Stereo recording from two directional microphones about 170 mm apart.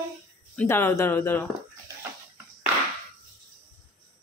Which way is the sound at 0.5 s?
15° left (ahead or behind).